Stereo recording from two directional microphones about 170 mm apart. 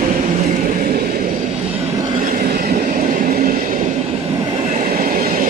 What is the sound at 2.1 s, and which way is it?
Train, 50° right (ahead or behind).